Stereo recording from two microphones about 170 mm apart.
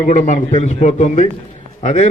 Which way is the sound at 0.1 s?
45° left (ahead or behind).